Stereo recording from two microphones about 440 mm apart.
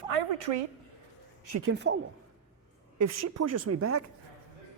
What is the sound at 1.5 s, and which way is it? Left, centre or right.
Speech, right.